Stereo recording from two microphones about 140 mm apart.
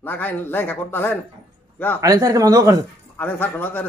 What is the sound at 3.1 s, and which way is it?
Speech, 15° left (ahead or behind).